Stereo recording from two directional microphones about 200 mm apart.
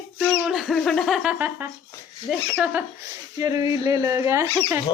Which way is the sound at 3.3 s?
15° right (ahead or behind).